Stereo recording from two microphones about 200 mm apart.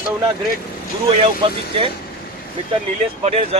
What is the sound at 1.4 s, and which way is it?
Speech, 25° right (ahead or behind).